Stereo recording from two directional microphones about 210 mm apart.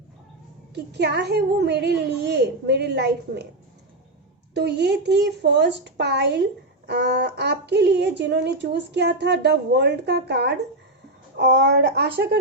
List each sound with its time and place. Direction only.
0.7 s speech: 55° right (ahead or behind)
4.5 s speech: 55° right (ahead or behind)